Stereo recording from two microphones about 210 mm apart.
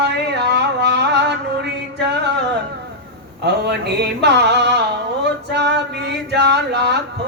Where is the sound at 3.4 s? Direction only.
50° right (ahead or behind).